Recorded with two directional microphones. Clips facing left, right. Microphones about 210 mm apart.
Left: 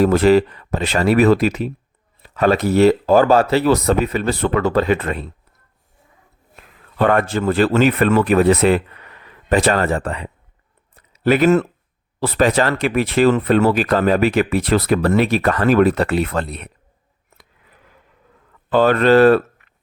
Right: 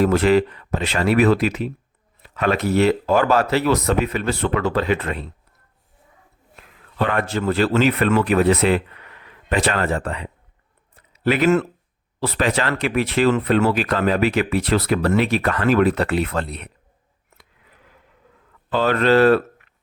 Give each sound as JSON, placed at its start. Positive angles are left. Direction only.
{"t": 0.0, "sound": "speech", "side_deg": 40}
{"t": 7.1, "sound": "speech", "side_deg": 45}
{"t": 18.7, "sound": "speech", "side_deg": 50}